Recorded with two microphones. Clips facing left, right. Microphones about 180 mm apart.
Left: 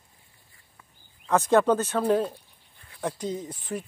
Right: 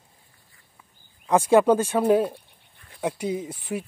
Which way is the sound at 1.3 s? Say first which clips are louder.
Right 3 dB; 10° right (ahead or behind).